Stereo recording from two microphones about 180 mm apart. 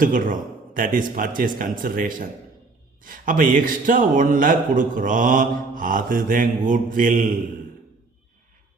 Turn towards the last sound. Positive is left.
turn(degrees=-50)  # may be behind; listen again after turning